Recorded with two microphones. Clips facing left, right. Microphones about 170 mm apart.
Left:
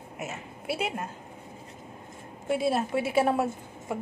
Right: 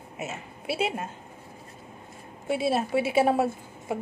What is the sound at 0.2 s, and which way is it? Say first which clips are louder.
Speech: right 2 dB; 25° right (ahead or behind).